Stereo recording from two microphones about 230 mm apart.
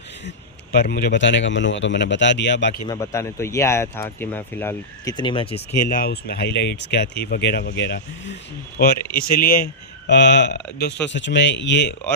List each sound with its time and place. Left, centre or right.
0.3 s speech: left
2.8 s speech: centre
5.9 s speech: left